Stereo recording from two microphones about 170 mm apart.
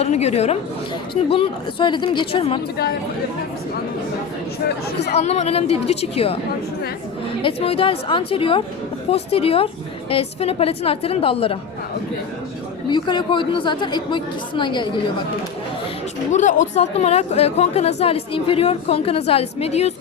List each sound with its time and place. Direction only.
0.0 s speech: 40° left (ahead or behind)
5.1 s speech: 40° left (ahead or behind)
7.4 s speech: 35° left (ahead or behind)
12.9 s a woman's voice: 25° left (ahead or behind)
16.3 s speech: 45° left (ahead or behind)